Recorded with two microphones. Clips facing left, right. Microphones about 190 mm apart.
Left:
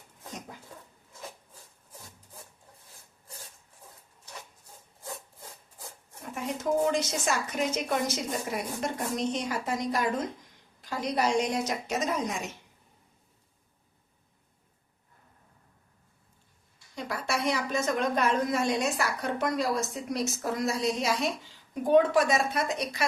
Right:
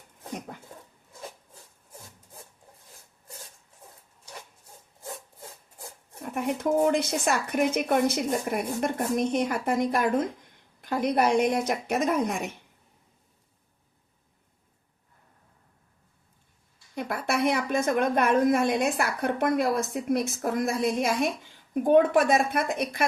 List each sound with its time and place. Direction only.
0.3 s a sound: 60° right (ahead or behind)
6.3 s a woman's voice: 60° right (ahead or behind)
16.9 s a woman's voice: 55° right (ahead or behind)